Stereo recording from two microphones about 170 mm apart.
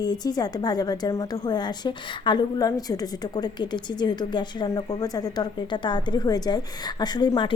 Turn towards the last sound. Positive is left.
turn(degrees=25)  # may be behind; listen again after turning